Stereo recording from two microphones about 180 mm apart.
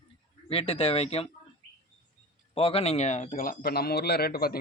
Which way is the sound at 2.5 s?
30° left (ahead or behind).